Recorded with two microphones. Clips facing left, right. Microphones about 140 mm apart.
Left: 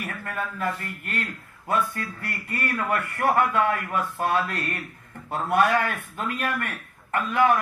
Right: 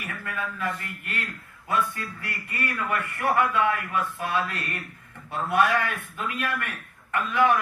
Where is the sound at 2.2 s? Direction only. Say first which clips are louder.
Left 1 dB; 40° left (ahead or behind).